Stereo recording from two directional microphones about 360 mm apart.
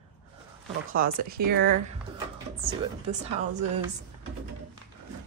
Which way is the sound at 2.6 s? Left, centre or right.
Centre.